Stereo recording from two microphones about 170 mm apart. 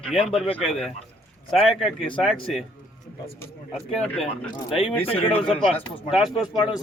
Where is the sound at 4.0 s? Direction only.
5° left (ahead or behind).